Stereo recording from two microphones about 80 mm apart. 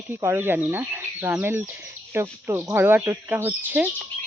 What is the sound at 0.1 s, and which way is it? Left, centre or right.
Speech, right.